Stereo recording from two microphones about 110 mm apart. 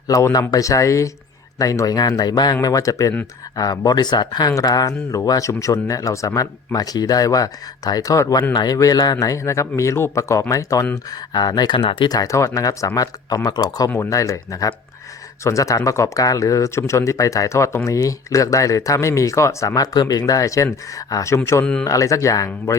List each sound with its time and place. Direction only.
0.1 s speech: 30° left (ahead or behind)
11.8 s speech: 55° left (ahead or behind)
12.0 s speech: 35° left (ahead or behind)
21.6 s speech: 10° left (ahead or behind)
21.8 s speech: 30° left (ahead or behind)